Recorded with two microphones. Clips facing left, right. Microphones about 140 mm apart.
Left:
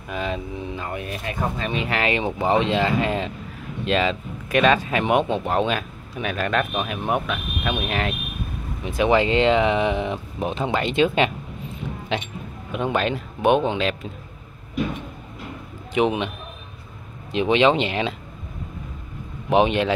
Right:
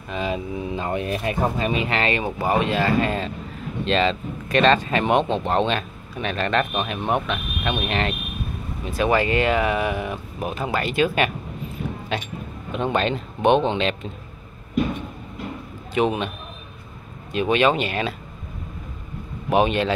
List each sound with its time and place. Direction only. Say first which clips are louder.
0.1 s speech: right 1 dB; centre (ahead or behind)
0.7 s speech: right 7 dB; 25° right (ahead or behind)
1.7 s speech: right 2 dB; 5° right (ahead or behind)
2.0 s speech: even; 15° left (ahead or behind)
8.8 s speech: left 2 dB; 15° left (ahead or behind)
15.9 s speech: left 1 dB; 15° left (ahead or behind)
17.3 s speech: left 1 dB; 20° left (ahead or behind)
19.5 s speech: left 1 dB; 15° left (ahead or behind)